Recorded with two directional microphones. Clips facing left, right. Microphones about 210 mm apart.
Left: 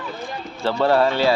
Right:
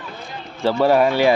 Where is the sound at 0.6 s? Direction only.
10° right (ahead or behind).